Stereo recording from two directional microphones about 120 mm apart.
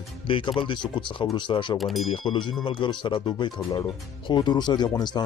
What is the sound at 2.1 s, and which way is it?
Speech, 45° left (ahead or behind).